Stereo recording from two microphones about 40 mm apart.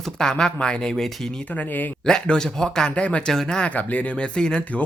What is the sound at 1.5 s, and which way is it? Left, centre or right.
Speech, left.